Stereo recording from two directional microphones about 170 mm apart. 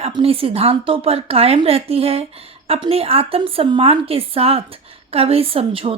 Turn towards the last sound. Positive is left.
turn(degrees=-35)  # may be behind; listen again after turning